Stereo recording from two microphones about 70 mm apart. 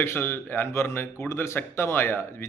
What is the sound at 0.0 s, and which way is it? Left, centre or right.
Speech, left.